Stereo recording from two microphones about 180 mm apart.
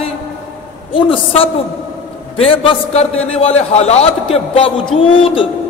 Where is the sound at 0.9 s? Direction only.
30° left (ahead or behind).